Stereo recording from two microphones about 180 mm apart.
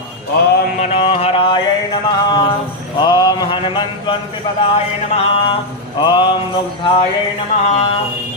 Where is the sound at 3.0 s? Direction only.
25° left (ahead or behind).